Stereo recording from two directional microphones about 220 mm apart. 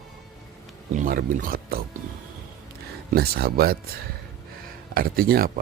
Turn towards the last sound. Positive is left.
turn(degrees=-40)  # may be behind; listen again after turning